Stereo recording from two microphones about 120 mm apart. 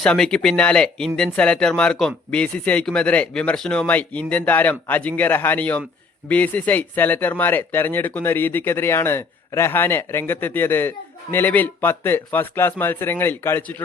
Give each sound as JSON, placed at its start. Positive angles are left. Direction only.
{"t": 0.0, "sound": "speech", "side_deg": 5}